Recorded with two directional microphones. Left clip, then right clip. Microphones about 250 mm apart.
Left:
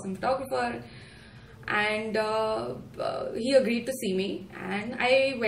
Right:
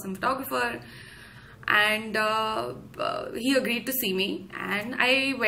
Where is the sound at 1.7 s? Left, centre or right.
Centre.